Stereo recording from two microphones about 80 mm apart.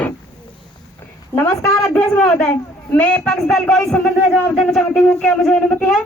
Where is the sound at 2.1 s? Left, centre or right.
Centre.